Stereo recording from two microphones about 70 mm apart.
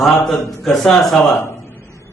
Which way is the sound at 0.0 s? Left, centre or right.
Centre.